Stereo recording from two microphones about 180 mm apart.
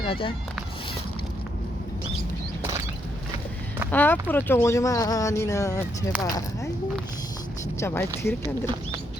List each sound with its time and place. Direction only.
0.0 s speech: 30° left (ahead or behind)
3.9 s speech: 10° left (ahead or behind)
7.8 s speech: 15° left (ahead or behind)